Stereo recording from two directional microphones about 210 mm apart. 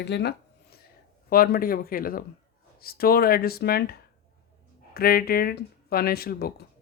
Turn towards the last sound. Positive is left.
turn(degrees=45)  # may be behind; listen again after turning